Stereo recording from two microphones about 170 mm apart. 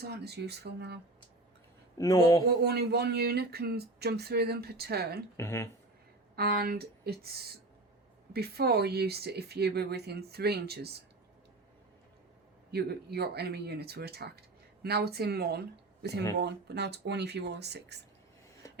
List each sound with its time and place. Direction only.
0.0 s speech: 75° right (ahead or behind)
2.0 s speech: 20° left (ahead or behind)
2.6 s speech: 75° right (ahead or behind)
5.4 s speech: 15° left (ahead or behind)
6.3 s speech: 65° right (ahead or behind)
12.7 s speech: 70° right (ahead or behind)